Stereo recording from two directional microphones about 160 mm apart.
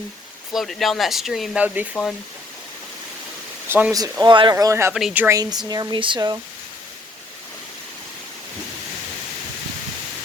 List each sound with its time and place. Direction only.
0.5 s speech: centre (ahead or behind)
1.9 s speech: 10° left (ahead or behind)
3.7 s speech: 10° right (ahead or behind)
4.2 s speech: 30° right (ahead or behind)
4.5 s speech: 15° right (ahead or behind)
4.9 s speech: 5° right (ahead or behind)
5.6 s speech: 25° right (ahead or behind)